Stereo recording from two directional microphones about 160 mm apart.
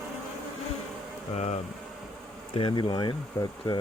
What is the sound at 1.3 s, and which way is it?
Speech, 45° left (ahead or behind).